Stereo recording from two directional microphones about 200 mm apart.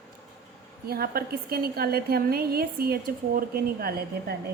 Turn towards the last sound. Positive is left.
turn(degrees=-50)  # may be behind; listen again after turning